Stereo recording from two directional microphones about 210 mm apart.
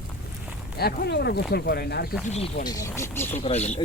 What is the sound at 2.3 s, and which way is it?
Speech, 30° left (ahead or behind).